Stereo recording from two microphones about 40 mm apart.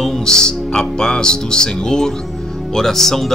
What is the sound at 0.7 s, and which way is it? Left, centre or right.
Speech, centre.